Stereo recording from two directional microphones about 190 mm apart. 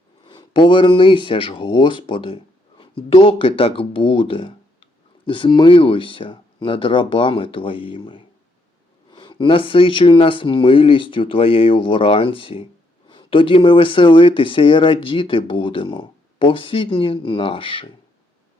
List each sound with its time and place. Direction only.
0.3 s speech: 25° left (ahead or behind)